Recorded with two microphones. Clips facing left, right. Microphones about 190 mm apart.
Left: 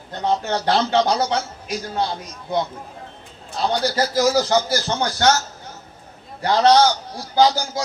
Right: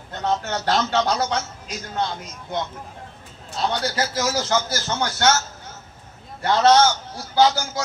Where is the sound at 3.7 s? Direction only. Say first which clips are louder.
Left 4 dB; 35° left (ahead or behind).